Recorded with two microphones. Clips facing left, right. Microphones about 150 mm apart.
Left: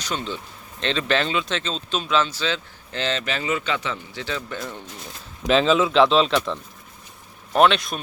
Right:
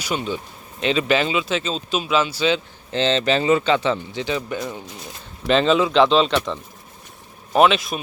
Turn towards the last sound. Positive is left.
turn(degrees=0)  # may be behind; listen again after turning